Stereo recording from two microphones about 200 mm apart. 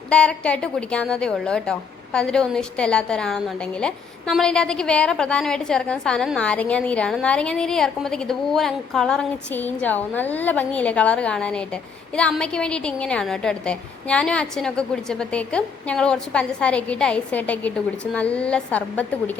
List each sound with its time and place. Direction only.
0.1 s a woman's voice: 5° left (ahead or behind)